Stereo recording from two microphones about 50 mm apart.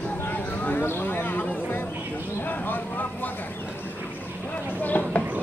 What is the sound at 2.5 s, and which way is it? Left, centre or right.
Vehicle, left.